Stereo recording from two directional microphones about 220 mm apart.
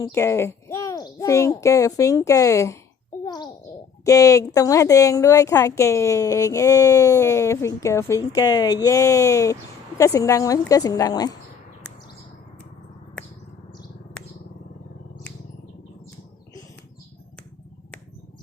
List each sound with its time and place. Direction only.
0.1 s speech: 10° left (ahead or behind)
3.2 s a sound: 20° left (ahead or behind)
4.0 s speech: 15° left (ahead or behind)